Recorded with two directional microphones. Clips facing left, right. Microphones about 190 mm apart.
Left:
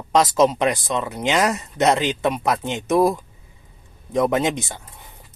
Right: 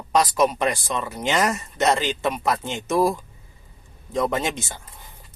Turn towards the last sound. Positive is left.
turn(degrees=20)  # may be behind; listen again after turning